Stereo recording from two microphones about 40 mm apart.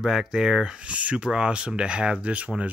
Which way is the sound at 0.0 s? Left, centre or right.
Centre.